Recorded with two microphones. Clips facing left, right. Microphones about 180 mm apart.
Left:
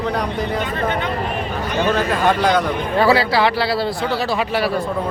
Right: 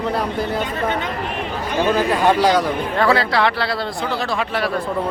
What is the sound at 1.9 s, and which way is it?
Speech, 10° right (ahead or behind).